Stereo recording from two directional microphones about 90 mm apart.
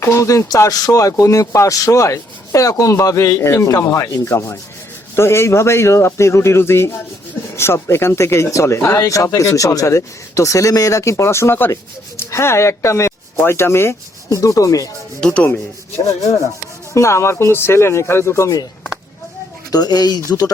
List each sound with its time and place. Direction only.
0.0 s speech: 35° left (ahead or behind)
14.3 s speech: 40° left (ahead or behind)
15.2 s rub: 10° left (ahead or behind)
16.9 s speech: 35° left (ahead or behind)
19.7 s speech: 50° left (ahead or behind)